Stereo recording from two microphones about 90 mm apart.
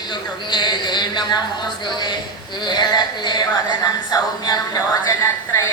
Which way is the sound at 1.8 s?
55° left (ahead or behind).